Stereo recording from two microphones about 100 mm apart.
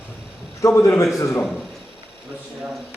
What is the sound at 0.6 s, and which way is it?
Mantra, 30° left (ahead or behind).